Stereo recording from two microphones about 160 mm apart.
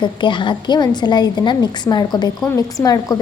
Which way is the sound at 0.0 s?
30° left (ahead or behind).